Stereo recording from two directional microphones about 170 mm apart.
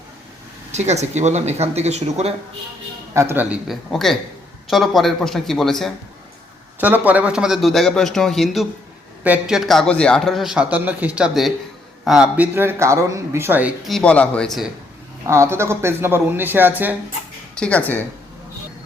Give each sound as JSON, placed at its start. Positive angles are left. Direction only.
{"t": 0.7, "sound": "speech", "side_deg": -40}
{"t": 3.2, "sound": "a man's voice", "side_deg": -10}
{"t": 6.7, "sound": "a man's voice", "side_deg": -10}
{"t": 15.3, "sound": "speech", "side_deg": -15}
{"t": 17.6, "sound": "speech", "side_deg": 10}